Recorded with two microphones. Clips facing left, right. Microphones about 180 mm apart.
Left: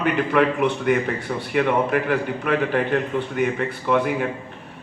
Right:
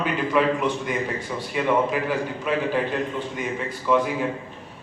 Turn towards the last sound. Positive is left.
turn(degrees=60)  # may be behind; listen again after turning